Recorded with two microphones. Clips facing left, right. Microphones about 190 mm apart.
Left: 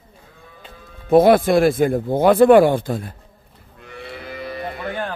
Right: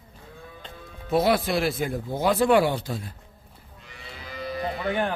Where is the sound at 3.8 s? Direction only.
60° left (ahead or behind).